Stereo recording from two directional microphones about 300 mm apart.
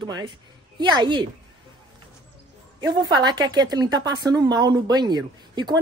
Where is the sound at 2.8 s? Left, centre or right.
Centre.